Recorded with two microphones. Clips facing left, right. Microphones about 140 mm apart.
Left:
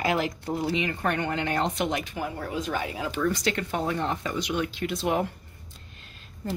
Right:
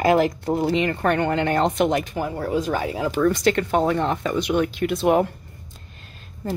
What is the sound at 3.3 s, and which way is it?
Speech, 55° right (ahead or behind).